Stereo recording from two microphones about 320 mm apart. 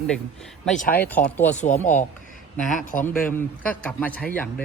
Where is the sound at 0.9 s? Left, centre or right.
Centre.